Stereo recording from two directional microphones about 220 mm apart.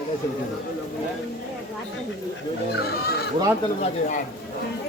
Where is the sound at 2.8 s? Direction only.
45° left (ahead or behind).